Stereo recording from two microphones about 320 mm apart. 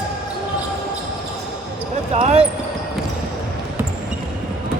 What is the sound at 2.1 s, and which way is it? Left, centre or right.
Speech, centre.